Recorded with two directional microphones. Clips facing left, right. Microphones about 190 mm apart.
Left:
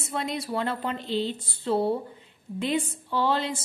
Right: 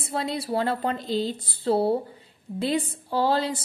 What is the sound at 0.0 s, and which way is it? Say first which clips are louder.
A woman's voice: right 2 dB; 35° right (ahead or behind).